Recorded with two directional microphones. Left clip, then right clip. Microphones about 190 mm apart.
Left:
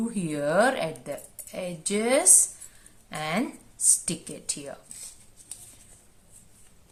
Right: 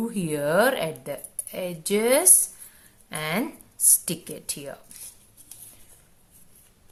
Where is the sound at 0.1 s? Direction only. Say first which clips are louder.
Right 3 dB; 30° right (ahead or behind).